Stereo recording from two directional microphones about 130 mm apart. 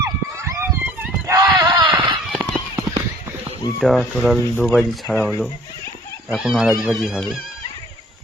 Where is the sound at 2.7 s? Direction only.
20° right (ahead or behind).